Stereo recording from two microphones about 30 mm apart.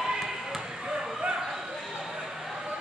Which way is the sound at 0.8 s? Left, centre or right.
Right.